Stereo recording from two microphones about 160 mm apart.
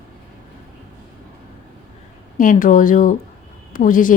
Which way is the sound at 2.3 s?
55° left (ahead or behind).